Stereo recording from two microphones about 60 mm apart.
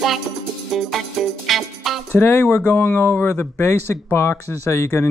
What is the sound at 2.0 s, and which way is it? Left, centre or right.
Speech, left.